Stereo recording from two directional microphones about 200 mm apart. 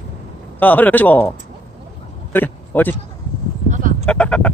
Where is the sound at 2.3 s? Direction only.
10° left (ahead or behind).